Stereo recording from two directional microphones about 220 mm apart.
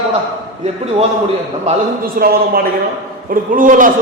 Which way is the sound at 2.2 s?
40° right (ahead or behind).